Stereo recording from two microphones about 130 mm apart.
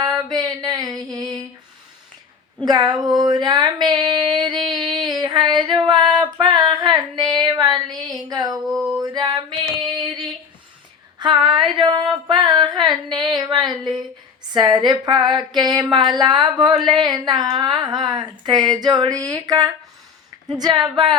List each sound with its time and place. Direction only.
0.0 s a sound: 30° right (ahead or behind)
1.1 s female singing: 30° right (ahead or behind)
2.6 s speech: 35° right (ahead or behind)
4.7 s female singing: 35° right (ahead or behind)
8.1 s a sound: 30° right (ahead or behind)
8.6 s male singing: 5° right (ahead or behind)
9.0 s female singing: 30° right (ahead or behind)
11.2 s a sound: 35° right (ahead or behind)
14.5 s speech: 35° right (ahead or behind)